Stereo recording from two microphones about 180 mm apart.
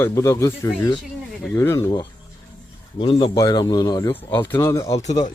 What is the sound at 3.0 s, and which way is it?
Speech, 30° left (ahead or behind).